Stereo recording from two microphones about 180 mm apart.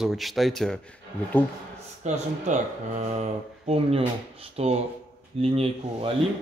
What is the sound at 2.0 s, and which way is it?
Speech, 40° right (ahead or behind).